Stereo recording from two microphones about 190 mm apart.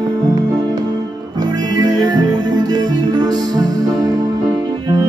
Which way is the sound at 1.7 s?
20° right (ahead or behind).